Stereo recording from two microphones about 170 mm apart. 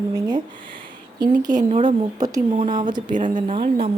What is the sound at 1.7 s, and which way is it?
A woman's voice, 35° right (ahead or behind).